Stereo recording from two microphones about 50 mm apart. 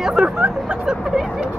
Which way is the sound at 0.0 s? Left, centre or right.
Centre.